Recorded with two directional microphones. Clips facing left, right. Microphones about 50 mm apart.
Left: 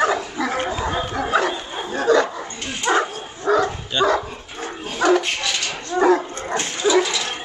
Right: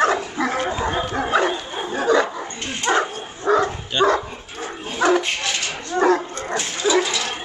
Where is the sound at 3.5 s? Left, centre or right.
Right.